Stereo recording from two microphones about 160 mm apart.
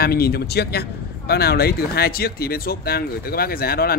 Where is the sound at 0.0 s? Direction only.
75° left (ahead or behind).